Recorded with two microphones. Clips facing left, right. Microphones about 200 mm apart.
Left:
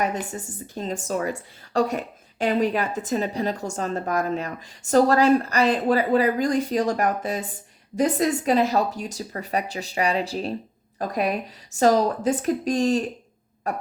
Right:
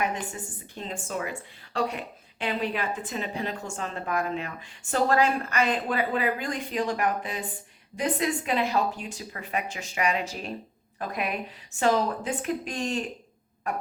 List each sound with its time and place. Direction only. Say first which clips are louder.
0.0 s a woman's voice: left 4 dB; 40° left (ahead or behind)